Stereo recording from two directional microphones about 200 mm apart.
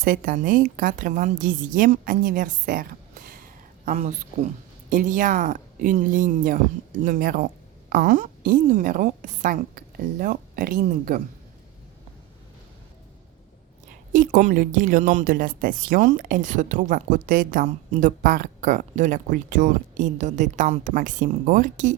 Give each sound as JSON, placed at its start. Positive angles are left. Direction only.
{"t": 0.0, "sound": "a woman's voice", "side_deg": -45}
{"t": 14.1, "sound": "a woman's voice", "side_deg": -40}